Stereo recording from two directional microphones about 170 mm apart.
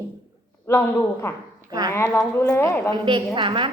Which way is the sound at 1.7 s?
20° right (ahead or behind).